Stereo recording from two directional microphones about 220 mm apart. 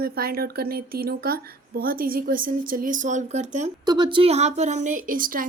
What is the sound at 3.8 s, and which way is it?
Speech, 20° right (ahead or behind).